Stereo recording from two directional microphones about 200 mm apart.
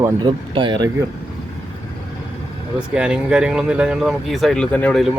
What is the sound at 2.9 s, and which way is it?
Speech, 5° right (ahead or behind).